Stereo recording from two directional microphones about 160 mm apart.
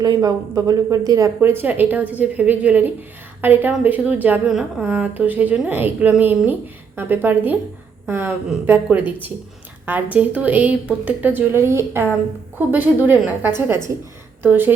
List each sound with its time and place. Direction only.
0.0 s a woman's voice: 25° right (ahead or behind)